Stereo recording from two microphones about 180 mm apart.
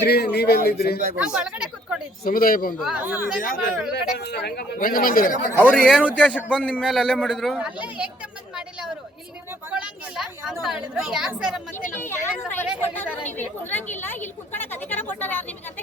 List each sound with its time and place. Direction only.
0.0 s speech: 65° left (ahead or behind)
1.1 s speech: 5° right (ahead or behind)
2.2 s speech: 55° left (ahead or behind)
2.7 s speech: 5° right (ahead or behind)
3.4 s speech: 55° left (ahead or behind)
5.6 s a man's voice: 5° left (ahead or behind)
9.6 s a man's voice: 5° right (ahead or behind)
11.9 s a woman's voice: 10° left (ahead or behind)